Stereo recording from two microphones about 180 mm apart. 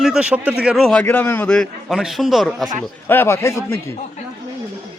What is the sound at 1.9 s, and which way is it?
Speech, centre (ahead or behind).